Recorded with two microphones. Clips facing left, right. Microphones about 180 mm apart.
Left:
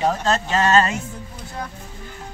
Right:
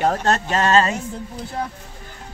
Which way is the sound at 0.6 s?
35° right (ahead or behind).